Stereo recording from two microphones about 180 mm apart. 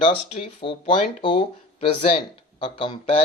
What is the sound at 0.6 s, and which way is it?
Speech, 25° left (ahead or behind).